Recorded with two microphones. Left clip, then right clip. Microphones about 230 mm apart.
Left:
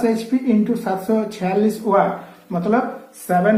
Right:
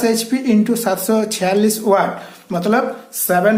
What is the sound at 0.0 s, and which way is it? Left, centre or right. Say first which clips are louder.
Speech: right 2 dB; right.